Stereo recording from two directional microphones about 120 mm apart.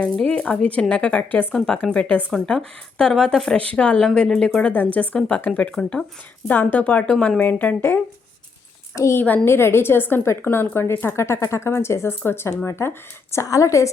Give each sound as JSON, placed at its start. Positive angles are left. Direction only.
{"t": 0.0, "sound": "a woman's voice", "side_deg": 10}
{"t": 9.0, "sound": "a woman's voice", "side_deg": 25}